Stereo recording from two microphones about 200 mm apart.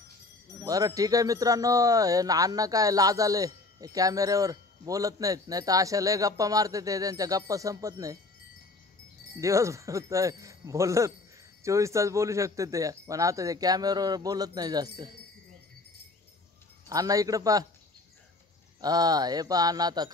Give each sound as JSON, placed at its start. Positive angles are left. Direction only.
{"t": 0.7, "sound": "speech", "side_deg": -15}
{"t": 9.2, "sound": "speech", "side_deg": -15}
{"t": 16.9, "sound": "speech", "side_deg": -15}
{"t": 18.8, "sound": "mantra", "side_deg": -20}